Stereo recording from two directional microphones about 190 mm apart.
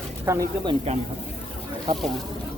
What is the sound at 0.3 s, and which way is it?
Speech, 20° right (ahead or behind).